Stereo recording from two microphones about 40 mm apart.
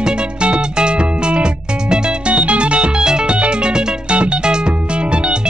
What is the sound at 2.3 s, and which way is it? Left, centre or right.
Music, right.